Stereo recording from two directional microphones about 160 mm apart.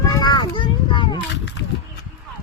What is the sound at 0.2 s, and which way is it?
Children playing, 25° left (ahead or behind).